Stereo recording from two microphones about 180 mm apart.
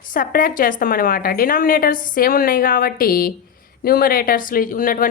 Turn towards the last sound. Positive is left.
turn(degrees=50)  # may be behind; listen again after turning